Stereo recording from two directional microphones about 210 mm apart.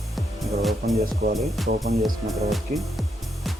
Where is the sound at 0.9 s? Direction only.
35° right (ahead or behind).